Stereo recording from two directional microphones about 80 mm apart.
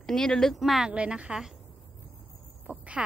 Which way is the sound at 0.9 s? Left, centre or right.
Centre.